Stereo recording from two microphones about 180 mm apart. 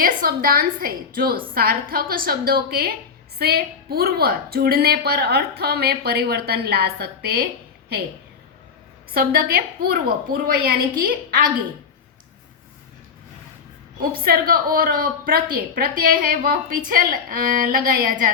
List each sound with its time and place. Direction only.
0.0 s a woman's voice: 55° right (ahead or behind)
9.1 s a woman's voice: 55° right (ahead or behind)
14.3 s a woman's voice: 55° right (ahead or behind)